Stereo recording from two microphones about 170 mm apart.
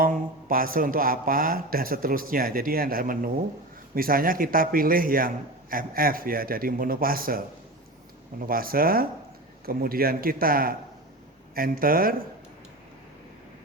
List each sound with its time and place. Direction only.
0.0 s speech: 55° right (ahead or behind)